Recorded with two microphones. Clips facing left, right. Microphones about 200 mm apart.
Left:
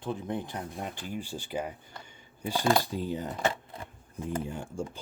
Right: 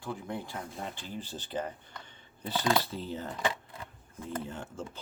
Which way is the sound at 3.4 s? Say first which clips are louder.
Left 3 dB; 45° left (ahead or behind).